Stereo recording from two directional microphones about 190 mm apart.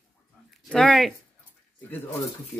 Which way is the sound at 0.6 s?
5° left (ahead or behind).